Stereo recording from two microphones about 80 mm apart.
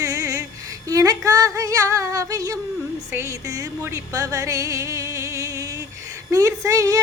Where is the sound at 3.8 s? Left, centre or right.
Right.